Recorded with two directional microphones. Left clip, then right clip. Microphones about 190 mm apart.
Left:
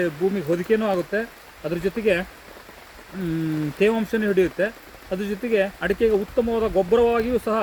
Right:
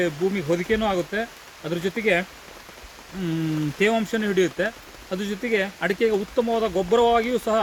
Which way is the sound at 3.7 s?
20° right (ahead or behind).